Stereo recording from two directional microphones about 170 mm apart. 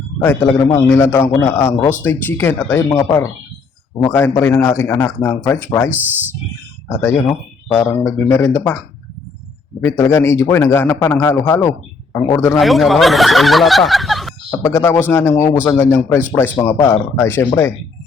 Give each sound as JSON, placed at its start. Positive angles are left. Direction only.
{"t": 0.2, "sound": "a man's voice", "side_deg": 15}
{"t": 5.9, "sound": "speech", "side_deg": -10}
{"t": 6.8, "sound": "a man's voice", "side_deg": 15}
{"t": 9.8, "sound": "a man's voice", "side_deg": 15}
{"t": 12.5, "sound": "speech", "side_deg": 0}
{"t": 14.6, "sound": "a man's voice", "side_deg": 15}